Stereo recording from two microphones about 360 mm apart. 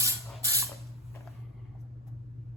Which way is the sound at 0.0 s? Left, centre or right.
Centre.